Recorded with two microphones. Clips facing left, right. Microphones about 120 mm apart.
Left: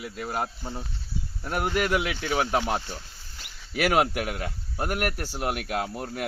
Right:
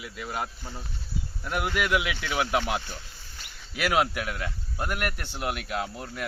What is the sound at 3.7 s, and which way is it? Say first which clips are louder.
Speech: left 2 dB; 50° left (ahead or behind).